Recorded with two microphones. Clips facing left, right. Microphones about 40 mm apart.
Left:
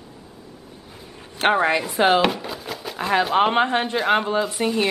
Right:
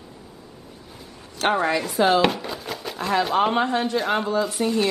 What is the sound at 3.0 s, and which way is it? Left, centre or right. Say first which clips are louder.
Speech: left 2 dB; centre.